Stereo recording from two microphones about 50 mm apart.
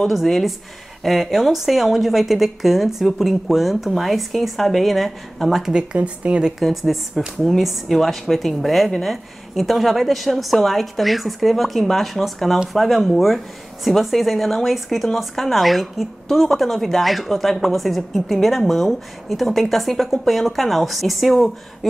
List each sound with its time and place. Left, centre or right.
0.1 s speech: centre
5.9 s a woman's voice: right
6.6 s speech: centre